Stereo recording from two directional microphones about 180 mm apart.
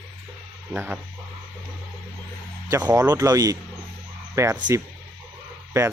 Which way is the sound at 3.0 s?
20° right (ahead or behind).